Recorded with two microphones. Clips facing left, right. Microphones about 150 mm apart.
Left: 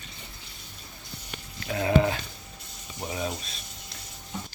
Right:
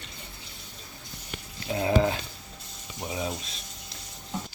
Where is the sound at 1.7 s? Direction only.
25° right (ahead or behind).